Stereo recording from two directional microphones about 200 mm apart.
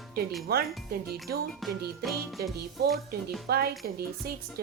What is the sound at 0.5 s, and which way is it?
Speech, 50° right (ahead or behind).